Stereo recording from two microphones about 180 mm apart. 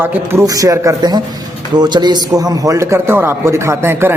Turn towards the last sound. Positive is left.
turn(degrees=-10)  # may be behind; listen again after turning